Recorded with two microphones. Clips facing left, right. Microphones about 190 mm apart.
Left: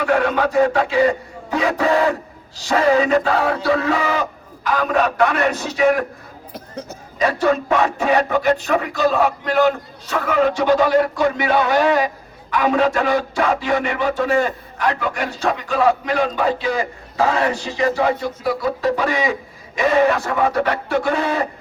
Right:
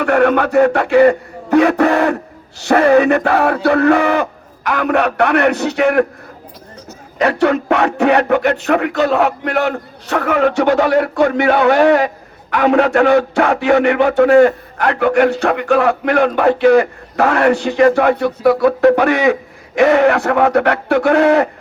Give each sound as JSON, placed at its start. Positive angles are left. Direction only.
{"t": 0.0, "sound": "speech", "side_deg": -60}
{"t": 7.2, "sound": "speech", "side_deg": -65}